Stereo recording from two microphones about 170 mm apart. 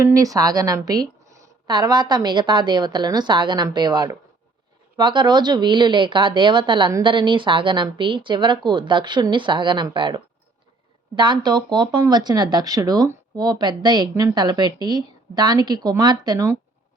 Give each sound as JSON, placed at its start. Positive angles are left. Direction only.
{"t": 0.0, "sound": "speech", "side_deg": -20}